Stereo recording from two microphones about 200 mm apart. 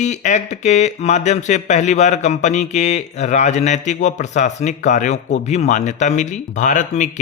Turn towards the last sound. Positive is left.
turn(degrees=35)  # may be behind; listen again after turning